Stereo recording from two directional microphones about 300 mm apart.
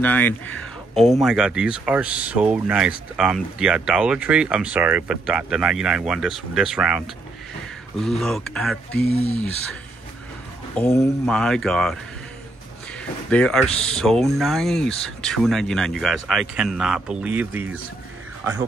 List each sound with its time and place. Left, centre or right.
0.0 s speech: centre
9.0 s speech: left
10.7 s speech: centre
13.3 s speech: centre